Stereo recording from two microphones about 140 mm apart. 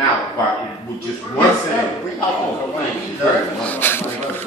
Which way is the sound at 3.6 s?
15° left (ahead or behind).